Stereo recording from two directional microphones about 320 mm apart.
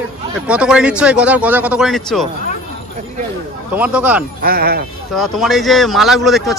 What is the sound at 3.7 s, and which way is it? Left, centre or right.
Speech, centre.